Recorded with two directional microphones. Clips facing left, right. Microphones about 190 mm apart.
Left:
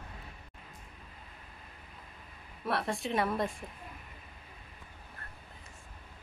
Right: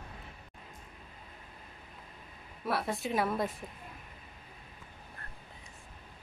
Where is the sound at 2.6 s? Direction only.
Centre (ahead or behind).